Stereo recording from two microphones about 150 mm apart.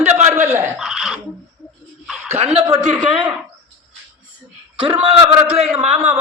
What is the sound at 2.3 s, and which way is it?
Speech, 45° right (ahead or behind).